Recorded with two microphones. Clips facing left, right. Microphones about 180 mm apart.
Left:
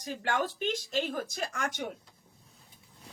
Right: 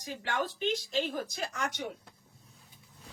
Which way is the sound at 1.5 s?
50° left (ahead or behind).